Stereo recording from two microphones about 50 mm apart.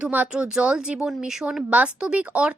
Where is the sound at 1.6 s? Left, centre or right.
Right.